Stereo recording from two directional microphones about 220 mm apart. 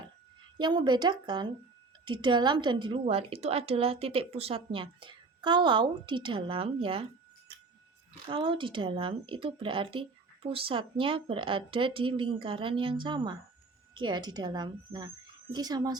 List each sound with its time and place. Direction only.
0.6 s a woman's voice: 20° right (ahead or behind)